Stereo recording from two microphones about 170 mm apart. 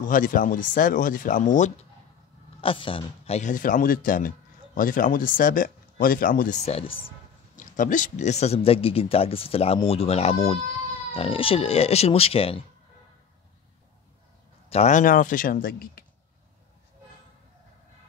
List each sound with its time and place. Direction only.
0.0 s speech: 50° left (ahead or behind)
2.6 s speech: 30° left (ahead or behind)
7.5 s speech: 50° left (ahead or behind); by 12.6 s 35° left (ahead or behind)
14.7 s speech: 45° left (ahead or behind); by 16.0 s 60° left (ahead or behind)